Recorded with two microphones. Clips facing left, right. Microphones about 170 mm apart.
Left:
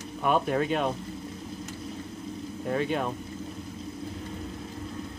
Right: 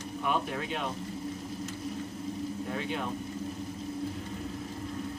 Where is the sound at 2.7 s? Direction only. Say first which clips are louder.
Left 10 dB; 50° left (ahead or behind).